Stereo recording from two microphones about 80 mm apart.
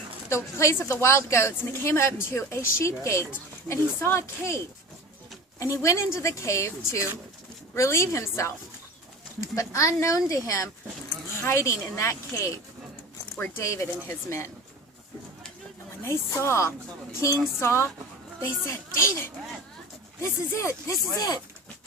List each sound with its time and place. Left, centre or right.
0.3 s speech: left
11.3 s speech: left
13.6 s speech: left
16.0 s speech: left
21.2 s speech: left